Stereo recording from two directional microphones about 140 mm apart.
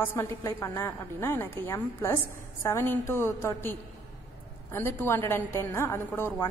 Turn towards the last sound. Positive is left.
turn(degrees=15)  # may be behind; listen again after turning